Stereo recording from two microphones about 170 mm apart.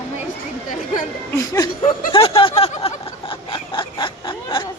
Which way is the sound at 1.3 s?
20° left (ahead or behind).